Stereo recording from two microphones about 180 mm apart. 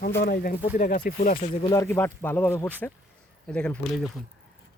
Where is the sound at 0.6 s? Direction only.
45° left (ahead or behind).